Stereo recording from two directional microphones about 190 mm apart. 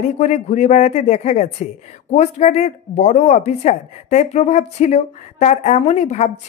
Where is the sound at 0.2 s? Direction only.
40° left (ahead or behind).